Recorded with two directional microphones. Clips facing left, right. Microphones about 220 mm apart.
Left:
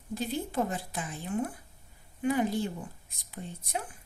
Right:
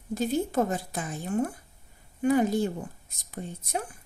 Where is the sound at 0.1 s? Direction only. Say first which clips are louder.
Right 6 dB; 45° right (ahead or behind).